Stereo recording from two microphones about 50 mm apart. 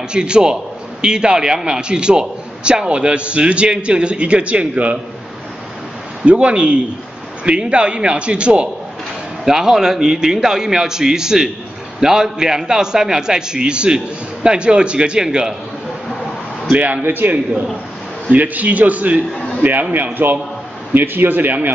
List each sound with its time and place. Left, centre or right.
0.1 s a man's voice: centre
6.2 s a man's voice: right
9.4 s a man's voice: centre
16.6 s a man's voice: right
17.0 s a man's voice: right